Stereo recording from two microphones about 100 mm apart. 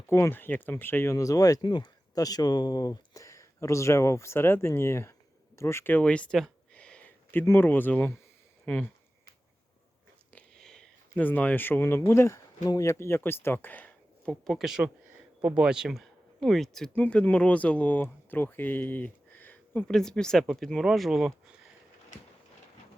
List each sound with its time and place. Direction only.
0.1 s speech: 25° left (ahead or behind)
5.5 s a sound: 25° left (ahead or behind); by 7.1 s 10° left (ahead or behind)
7.4 s speech: 20° left (ahead or behind)
10.6 s a sound: 5° left (ahead or behind)
11.1 s speech: 20° left (ahead or behind)
14.4 s speech: centre (ahead or behind)
16.9 s speech: 15° left (ahead or behind)
19.9 s speech: 5° left (ahead or behind)